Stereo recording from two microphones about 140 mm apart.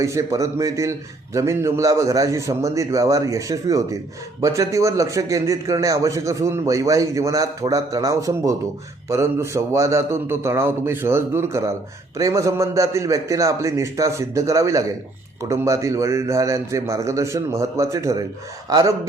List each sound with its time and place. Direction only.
0.0 s a man's voice: 20° right (ahead or behind)